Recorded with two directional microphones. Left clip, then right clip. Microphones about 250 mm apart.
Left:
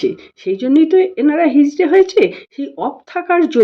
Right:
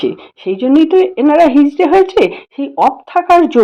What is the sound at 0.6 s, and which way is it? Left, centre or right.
Speech, right.